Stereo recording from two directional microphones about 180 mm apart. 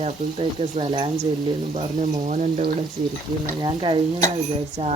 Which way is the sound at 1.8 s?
40° right (ahead or behind).